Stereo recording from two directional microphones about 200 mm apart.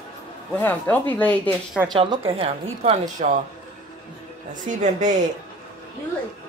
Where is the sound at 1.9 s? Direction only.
25° right (ahead or behind).